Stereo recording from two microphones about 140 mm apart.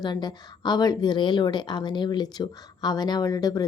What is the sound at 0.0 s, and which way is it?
A woman's voice, 30° left (ahead or behind).